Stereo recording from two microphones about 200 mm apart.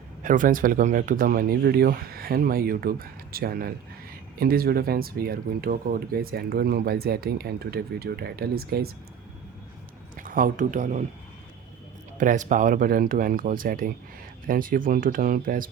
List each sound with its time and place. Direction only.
0.2 s speech: 40° right (ahead or behind)
10.2 s speech: 45° right (ahead or behind)
12.1 s speech: 40° right (ahead or behind)